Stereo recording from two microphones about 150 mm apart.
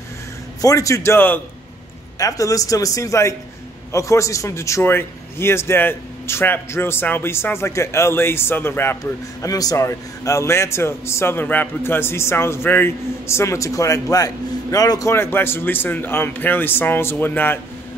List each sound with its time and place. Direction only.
0.6 s a man's voice: 20° left (ahead or behind)